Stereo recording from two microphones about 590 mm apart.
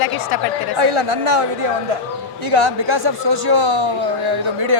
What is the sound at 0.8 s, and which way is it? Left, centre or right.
Speech, right.